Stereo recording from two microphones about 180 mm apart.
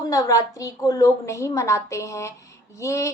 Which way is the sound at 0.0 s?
20° left (ahead or behind).